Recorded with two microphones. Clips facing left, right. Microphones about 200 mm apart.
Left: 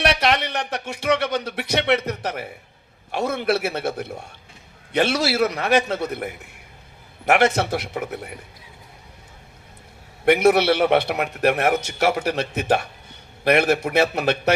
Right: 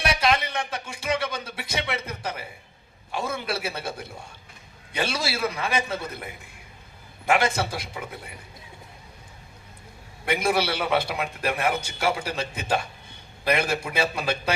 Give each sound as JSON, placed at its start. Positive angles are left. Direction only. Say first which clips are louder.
{"t": 0.0, "sound": "a man's voice", "louder": "left 3 dB", "side_deg": 70}
{"t": 4.9, "sound": "speech", "louder": "left 8 dB", "side_deg": 70}
{"t": 7.7, "sound": "a man's voice", "louder": "left 8 dB", "side_deg": 65}
{"t": 10.2, "sound": "a man's voice", "louder": "left 9 dB", "side_deg": 65}
{"t": 13.4, "sound": "a man's voice", "louder": "left 7 dB", "side_deg": 65}